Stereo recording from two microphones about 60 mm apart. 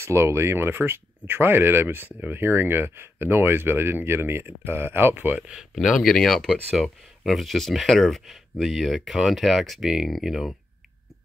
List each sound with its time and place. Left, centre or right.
0.0 s speech: right
5.5 s speech: centre